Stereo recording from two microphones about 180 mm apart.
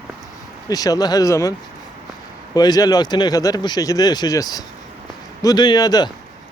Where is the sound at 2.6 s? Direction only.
20° left (ahead or behind).